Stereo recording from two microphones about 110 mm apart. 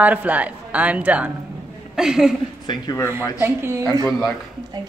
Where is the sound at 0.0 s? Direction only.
15° right (ahead or behind).